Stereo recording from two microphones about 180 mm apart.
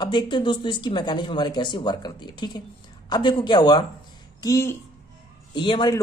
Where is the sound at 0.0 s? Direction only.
25° left (ahead or behind).